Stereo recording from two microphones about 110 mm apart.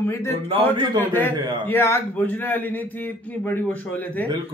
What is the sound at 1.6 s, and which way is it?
A man's voice, 20° left (ahead or behind).